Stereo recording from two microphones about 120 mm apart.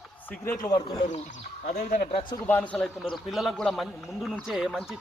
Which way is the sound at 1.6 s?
90° left.